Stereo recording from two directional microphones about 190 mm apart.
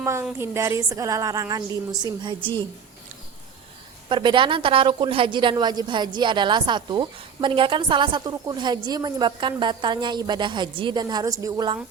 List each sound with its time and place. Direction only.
0.0 s a woman's voice: 15° right (ahead or behind)
4.1 s a woman's voice: 25° right (ahead or behind)